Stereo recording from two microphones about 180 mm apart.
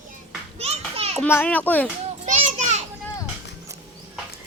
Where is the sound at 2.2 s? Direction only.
40° right (ahead or behind).